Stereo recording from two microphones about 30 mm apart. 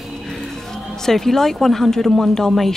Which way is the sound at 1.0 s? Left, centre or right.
Centre.